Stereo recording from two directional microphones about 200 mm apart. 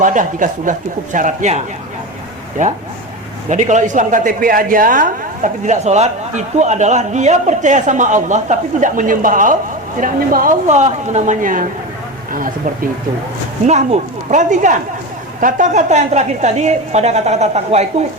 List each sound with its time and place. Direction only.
0.0 s speech: 40° right (ahead or behind)
13.7 s speech: 35° right (ahead or behind)